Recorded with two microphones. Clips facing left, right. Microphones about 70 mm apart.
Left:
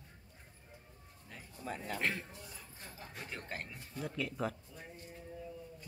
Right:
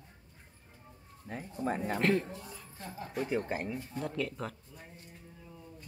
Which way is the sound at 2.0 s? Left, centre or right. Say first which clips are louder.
Right 9 dB; centre.